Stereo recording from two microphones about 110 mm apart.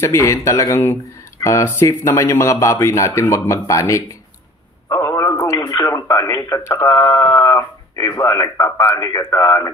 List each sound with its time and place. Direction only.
0.0 s a man's voice: 30° left (ahead or behind)
4.8 s a sound: 25° left (ahead or behind)
5.9 s speech: 30° left (ahead or behind)